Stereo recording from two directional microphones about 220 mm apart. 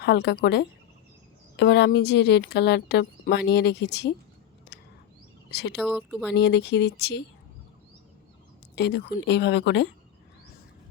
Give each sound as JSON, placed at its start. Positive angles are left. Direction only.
{"t": 0.0, "sound": "speech", "side_deg": 50}
{"t": 4.7, "sound": "a sound", "side_deg": 50}
{"t": 5.5, "sound": "speech", "side_deg": 50}
{"t": 5.8, "sound": "speech", "side_deg": 0}
{"t": 6.3, "sound": "speech", "side_deg": 50}
{"t": 8.7, "sound": "speech", "side_deg": 50}